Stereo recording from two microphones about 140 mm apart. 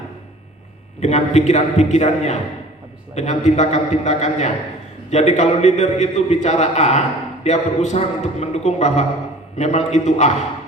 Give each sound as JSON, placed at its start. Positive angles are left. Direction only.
{"t": 0.9, "sound": "a man's voice", "side_deg": 50}